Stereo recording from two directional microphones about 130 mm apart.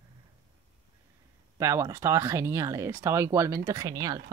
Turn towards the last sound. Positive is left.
turn(degrees=-30)  # may be behind; listen again after turning